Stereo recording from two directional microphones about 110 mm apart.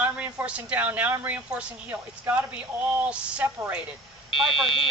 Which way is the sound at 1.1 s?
15° right (ahead or behind).